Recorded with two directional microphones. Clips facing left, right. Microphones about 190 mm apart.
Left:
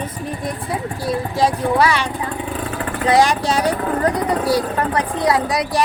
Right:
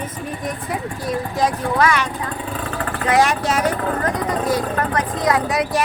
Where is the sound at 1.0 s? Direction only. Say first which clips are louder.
Left 2 dB; 30° left (ahead or behind).